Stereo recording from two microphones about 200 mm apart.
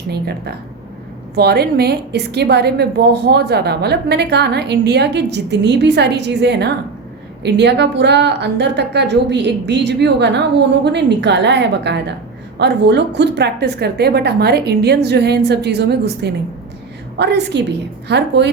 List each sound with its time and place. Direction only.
0.1 s a woman's voice: 55° right (ahead or behind)